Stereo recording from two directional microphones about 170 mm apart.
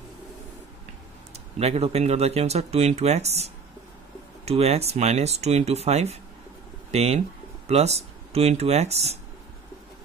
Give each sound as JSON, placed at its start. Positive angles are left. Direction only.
{"t": 1.3, "sound": "speech", "side_deg": -35}